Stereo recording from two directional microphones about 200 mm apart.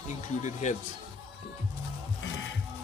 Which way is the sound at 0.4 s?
35° left (ahead or behind).